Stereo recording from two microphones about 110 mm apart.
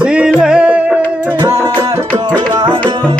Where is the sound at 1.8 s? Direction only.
40° right (ahead or behind).